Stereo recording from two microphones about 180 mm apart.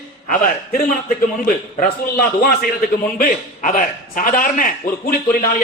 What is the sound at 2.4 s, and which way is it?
Speech, 55° left (ahead or behind).